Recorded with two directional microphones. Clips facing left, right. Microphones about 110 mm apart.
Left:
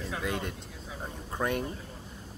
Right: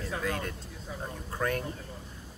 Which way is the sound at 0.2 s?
20° left (ahead or behind).